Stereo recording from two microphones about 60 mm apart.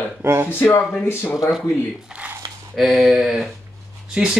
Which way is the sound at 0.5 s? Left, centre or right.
Left.